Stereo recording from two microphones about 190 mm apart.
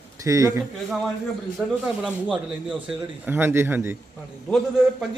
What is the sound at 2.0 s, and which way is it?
A man's voice, 5° right (ahead or behind).